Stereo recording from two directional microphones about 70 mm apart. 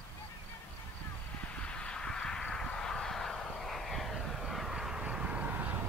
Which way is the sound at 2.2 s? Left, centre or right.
Centre.